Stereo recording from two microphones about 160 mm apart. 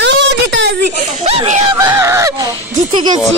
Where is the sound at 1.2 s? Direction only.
45° right (ahead or behind).